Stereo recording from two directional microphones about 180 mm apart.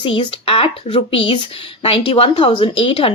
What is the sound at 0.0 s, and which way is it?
A woman's voice, 25° left (ahead or behind).